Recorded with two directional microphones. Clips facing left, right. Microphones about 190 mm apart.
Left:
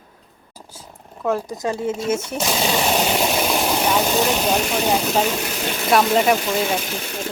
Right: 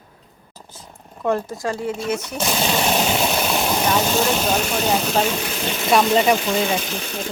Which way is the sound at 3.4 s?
10° left (ahead or behind).